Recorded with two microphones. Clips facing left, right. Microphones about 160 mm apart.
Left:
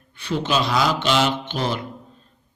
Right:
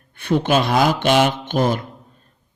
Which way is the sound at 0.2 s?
50° right (ahead or behind).